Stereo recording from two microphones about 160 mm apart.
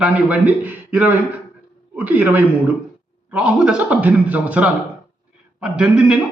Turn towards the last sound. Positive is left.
turn(degrees=-5)  # may be behind; listen again after turning